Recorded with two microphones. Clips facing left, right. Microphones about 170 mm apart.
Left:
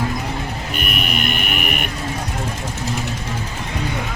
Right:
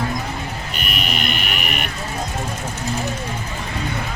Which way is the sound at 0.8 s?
50° left (ahead or behind).